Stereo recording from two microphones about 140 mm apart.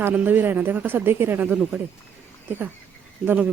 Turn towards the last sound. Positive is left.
turn(degrees=-10)  # may be behind; listen again after turning